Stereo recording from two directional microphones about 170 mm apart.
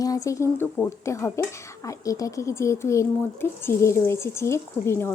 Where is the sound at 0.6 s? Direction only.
15° left (ahead or behind).